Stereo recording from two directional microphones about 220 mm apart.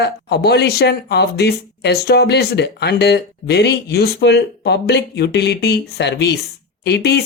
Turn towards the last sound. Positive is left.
turn(degrees=50)  # may be behind; listen again after turning